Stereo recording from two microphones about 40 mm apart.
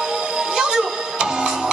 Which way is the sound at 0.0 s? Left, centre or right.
Centre.